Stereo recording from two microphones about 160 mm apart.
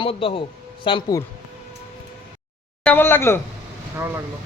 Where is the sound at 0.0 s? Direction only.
35° left (ahead or behind).